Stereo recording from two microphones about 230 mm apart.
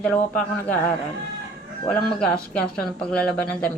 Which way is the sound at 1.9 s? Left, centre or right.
Centre.